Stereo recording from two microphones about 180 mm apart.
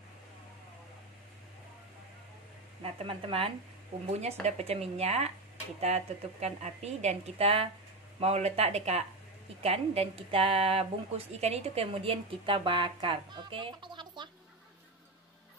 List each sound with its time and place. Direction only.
2.8 s a woman's voice: 30° right (ahead or behind)